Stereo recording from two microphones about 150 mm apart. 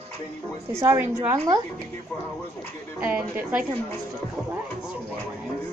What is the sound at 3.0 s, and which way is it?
Speech, 10° right (ahead or behind).